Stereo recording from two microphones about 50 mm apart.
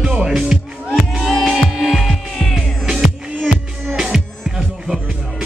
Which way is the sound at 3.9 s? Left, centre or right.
Centre.